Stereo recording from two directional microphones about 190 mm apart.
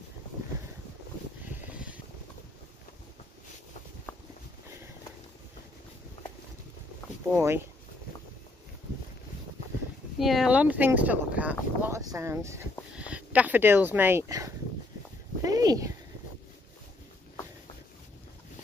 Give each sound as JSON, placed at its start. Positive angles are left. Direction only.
{"t": 7.3, "sound": "speech", "side_deg": -15}
{"t": 10.1, "sound": "speech", "side_deg": 0}
{"t": 15.4, "sound": "a sound", "side_deg": -20}